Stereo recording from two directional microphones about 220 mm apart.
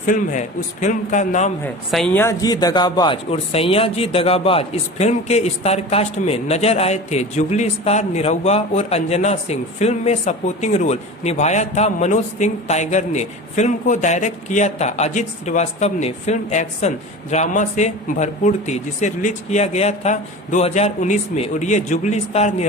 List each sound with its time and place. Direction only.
0.0 s a man's voice: 35° left (ahead or behind)
1.6 s a man's voice: 5° left (ahead or behind); by 22.6 s 30° left (ahead or behind)